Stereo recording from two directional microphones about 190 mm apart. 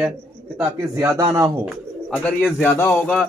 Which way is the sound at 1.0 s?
20° right (ahead or behind).